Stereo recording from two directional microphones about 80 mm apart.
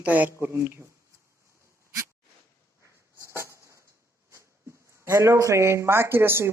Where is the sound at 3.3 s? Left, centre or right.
Right.